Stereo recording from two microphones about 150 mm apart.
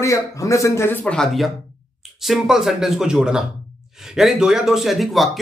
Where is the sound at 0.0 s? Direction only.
20° left (ahead or behind).